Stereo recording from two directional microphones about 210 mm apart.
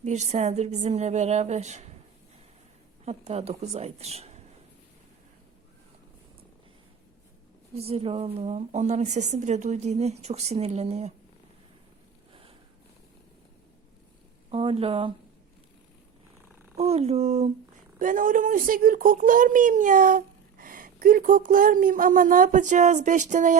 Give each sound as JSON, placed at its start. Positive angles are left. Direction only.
{"t": 0.0, "sound": "speech", "side_deg": -35}
{"t": 3.0, "sound": "speech", "side_deg": -30}
{"t": 7.8, "sound": "speech", "side_deg": -30}
{"t": 12.3, "sound": "a sound", "side_deg": -25}
{"t": 14.5, "sound": "speech", "side_deg": -25}
{"t": 16.7, "sound": "speech", "side_deg": -30}